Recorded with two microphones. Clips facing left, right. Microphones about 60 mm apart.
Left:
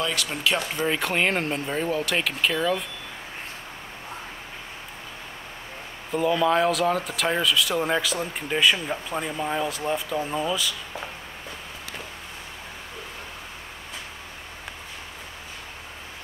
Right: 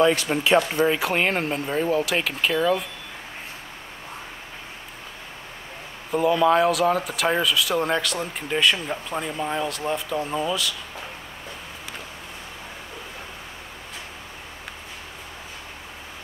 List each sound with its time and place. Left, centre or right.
0.0 s speech: right
0.8 s speech: centre
6.1 s speech: centre